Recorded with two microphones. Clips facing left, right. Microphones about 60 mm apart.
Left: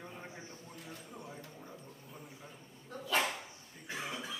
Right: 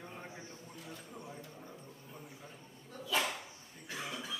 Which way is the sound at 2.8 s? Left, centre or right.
Left.